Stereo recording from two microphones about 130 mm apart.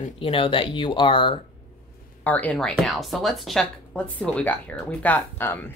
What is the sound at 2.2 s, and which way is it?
Speech, 10° left (ahead or behind).